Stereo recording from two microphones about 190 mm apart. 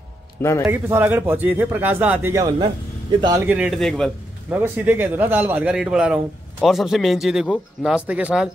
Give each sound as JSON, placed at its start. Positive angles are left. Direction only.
{"t": 0.7, "sound": "speech", "side_deg": -10}
{"t": 3.4, "sound": "a man's voice", "side_deg": -5}
{"t": 4.6, "sound": "speech", "side_deg": -10}